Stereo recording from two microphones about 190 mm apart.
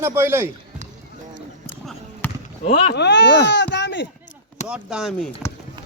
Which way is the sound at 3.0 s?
65° left (ahead or behind).